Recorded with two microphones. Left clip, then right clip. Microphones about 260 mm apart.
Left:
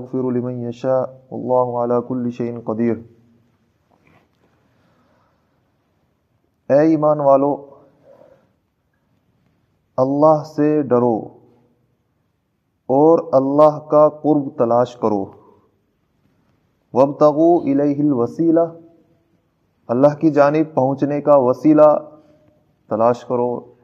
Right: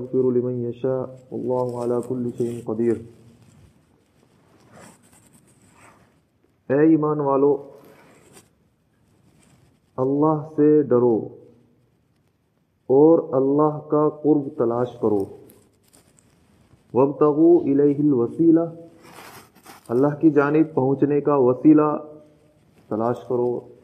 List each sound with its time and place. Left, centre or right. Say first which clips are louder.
0.1 s a man's voice: right 1 dB; left
6.7 s a man's voice: left 4 dB; left
9.9 s a man's voice: left 7 dB; left
12.8 s a man's voice: left 2 dB; left
16.9 s a man's voice: left 5 dB; left
19.9 s a man's voice: left 4 dB; left